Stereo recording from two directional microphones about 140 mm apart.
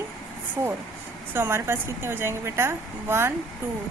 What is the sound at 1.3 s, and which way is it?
A woman's voice, 15° right (ahead or behind).